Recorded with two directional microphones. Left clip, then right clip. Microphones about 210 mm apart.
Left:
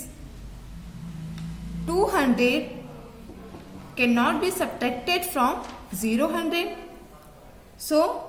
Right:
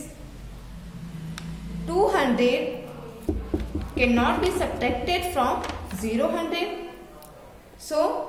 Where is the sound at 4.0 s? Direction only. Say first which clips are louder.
Right 1 dB; 30° left (ahead or behind).